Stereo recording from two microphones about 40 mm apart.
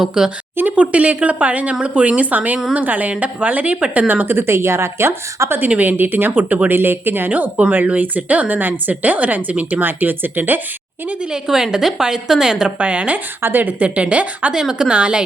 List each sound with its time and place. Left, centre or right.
0.2 s a woman's voice: centre
0.8 s a woman's voice: right
3.9 s speech: right
4.4 s a woman's voice: right
5.8 s speech: right
7.9 s speech: right
9.8 s speech: right
11.3 s a woman's voice: centre
12.6 s a woman's voice: right
13.4 s speech: right
13.7 s a woman's voice: right
14.5 s a woman's voice: centre